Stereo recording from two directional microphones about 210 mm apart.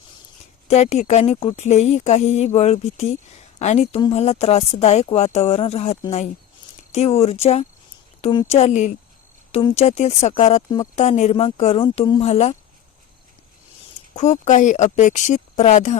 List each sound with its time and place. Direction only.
0.7 s a woman's voice: 30° left (ahead or behind)
14.2 s a woman's voice: 35° left (ahead or behind)